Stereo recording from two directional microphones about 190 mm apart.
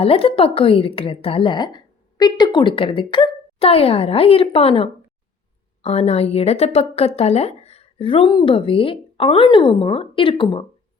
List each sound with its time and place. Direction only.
0.0 s a woman's voice: 30° left (ahead or behind)